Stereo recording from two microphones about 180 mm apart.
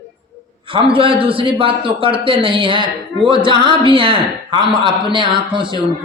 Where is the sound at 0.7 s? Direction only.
30° right (ahead or behind).